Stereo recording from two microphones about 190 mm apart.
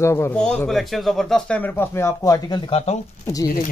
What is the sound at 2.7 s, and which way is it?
Speech, 35° left (ahead or behind).